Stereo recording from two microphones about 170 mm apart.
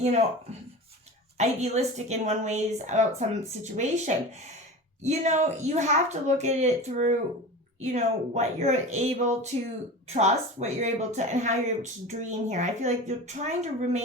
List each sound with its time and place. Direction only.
1.4 s speech: 40° right (ahead or behind)